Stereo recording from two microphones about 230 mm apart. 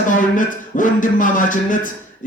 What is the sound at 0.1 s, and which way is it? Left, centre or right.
Speech, left.